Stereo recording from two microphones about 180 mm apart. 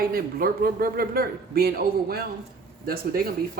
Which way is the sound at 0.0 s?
55° right (ahead or behind).